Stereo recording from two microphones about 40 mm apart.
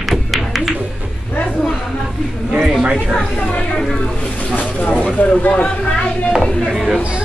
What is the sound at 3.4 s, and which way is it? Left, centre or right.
A woman's voice, left.